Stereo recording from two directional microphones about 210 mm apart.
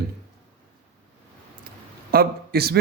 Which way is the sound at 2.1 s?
45° right (ahead or behind).